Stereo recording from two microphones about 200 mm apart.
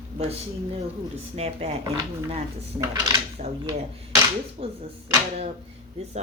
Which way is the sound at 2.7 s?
20° right (ahead or behind).